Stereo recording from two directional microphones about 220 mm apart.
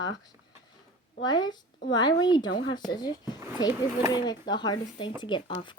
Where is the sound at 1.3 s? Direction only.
20° left (ahead or behind).